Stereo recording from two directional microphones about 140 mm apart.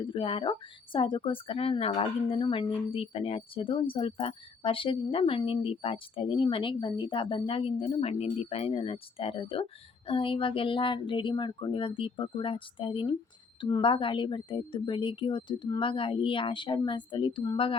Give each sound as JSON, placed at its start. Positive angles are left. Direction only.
{"t": 0.0, "sound": "a woman's voice", "side_deg": 40}